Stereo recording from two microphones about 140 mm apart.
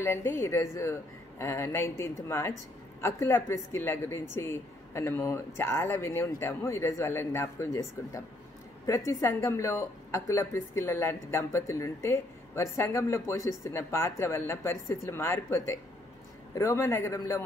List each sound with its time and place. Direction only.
0.0 s speech: 15° left (ahead or behind)